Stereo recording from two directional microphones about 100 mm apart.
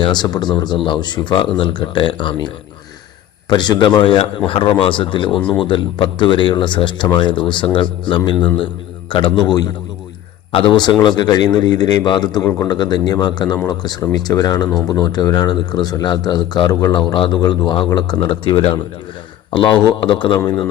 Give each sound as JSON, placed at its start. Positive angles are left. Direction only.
{"t": 0.0, "sound": "speech", "side_deg": 45}
{"t": 3.5, "sound": "speech", "side_deg": 45}
{"t": 4.2, "sound": "a man's voice", "side_deg": 65}
{"t": 18.2, "sound": "a man's voice", "side_deg": 60}
{"t": 19.5, "sound": "speech", "side_deg": 50}